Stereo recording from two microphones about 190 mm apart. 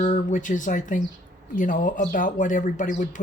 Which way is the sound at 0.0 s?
40° left (ahead or behind).